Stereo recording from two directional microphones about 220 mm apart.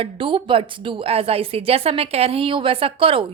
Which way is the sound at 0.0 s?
25° right (ahead or behind).